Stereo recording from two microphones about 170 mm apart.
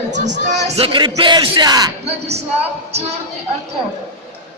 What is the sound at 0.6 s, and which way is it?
Speech, 35° right (ahead or behind).